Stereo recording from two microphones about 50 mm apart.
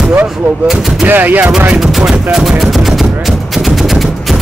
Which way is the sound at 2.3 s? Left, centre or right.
Centre.